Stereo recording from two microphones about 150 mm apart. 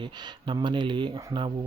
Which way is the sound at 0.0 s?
30° right (ahead or behind).